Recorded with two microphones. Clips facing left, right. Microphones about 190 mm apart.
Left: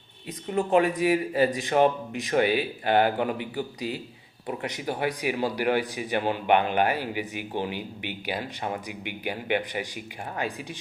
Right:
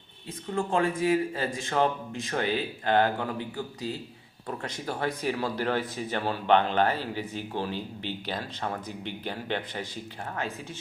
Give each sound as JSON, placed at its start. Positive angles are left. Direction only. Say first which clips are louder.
{"t": 0.5, "sound": "speech", "louder": "left 4 dB", "side_deg": 15}